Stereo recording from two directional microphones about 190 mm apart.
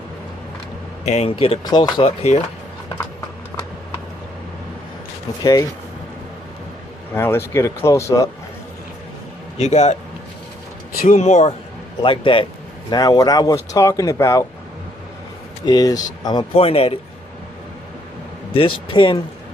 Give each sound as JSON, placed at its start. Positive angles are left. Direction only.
{"t": 1.0, "sound": "speech", "side_deg": 35}
{"t": 5.4, "sound": "speech", "side_deg": 20}
{"t": 7.1, "sound": "speech", "side_deg": 15}
{"t": 9.6, "sound": "speech", "side_deg": 35}
{"t": 11.0, "sound": "speech", "side_deg": 35}
{"t": 15.6, "sound": "speech", "side_deg": 20}
{"t": 18.5, "sound": "speech", "side_deg": 25}